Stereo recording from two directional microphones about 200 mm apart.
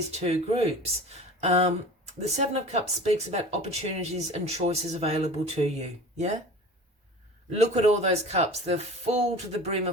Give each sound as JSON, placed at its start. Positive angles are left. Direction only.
{"t": 0.1, "sound": "speech", "side_deg": -30}
{"t": 7.5, "sound": "speech", "side_deg": -35}